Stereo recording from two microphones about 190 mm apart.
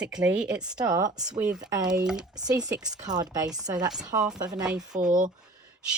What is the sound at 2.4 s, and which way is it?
Speech, 20° right (ahead or behind).